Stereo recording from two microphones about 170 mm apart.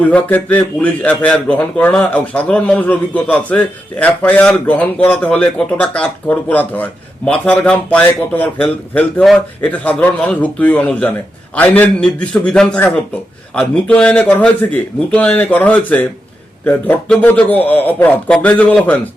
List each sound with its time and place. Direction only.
0.0 s speech: 10° left (ahead or behind)